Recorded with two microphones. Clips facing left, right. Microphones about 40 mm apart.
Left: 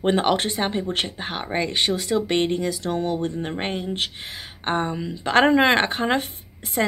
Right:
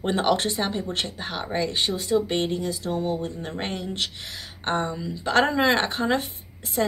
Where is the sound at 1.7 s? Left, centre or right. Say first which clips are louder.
Left 1 dB; left.